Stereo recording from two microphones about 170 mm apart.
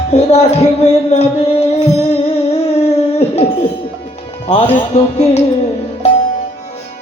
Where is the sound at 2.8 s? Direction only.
40° left (ahead or behind).